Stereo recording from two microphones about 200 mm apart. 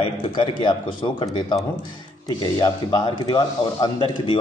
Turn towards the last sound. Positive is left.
turn(degrees=25)  # may be behind; listen again after turning